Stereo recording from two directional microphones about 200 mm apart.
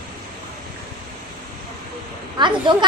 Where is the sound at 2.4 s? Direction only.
25° right (ahead or behind).